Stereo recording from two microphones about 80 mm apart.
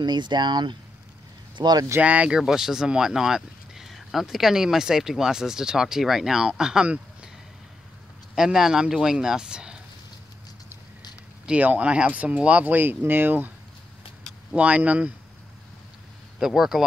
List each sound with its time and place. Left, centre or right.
0.0 s speech: right
2.0 s speech: centre
8.4 s speech: centre
11.4 s speech: centre
14.5 s speech: centre
16.3 s speech: centre